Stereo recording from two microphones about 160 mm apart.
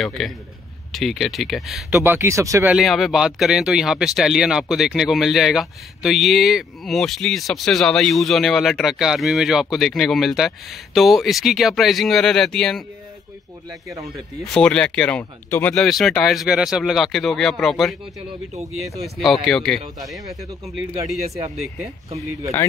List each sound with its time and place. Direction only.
0.2 s speech: centre (ahead or behind)
1.9 s speech: 15° right (ahead or behind)
2.7 s speech: centre (ahead or behind)
13.7 s speech: 20° right (ahead or behind)
14.4 s speech: 5° left (ahead or behind)
19.1 s speech: centre (ahead or behind)